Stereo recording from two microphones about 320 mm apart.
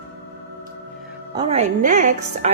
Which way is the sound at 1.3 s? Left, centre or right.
Centre.